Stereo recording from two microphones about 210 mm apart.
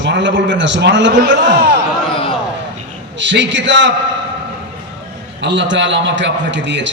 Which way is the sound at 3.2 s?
60° right (ahead or behind).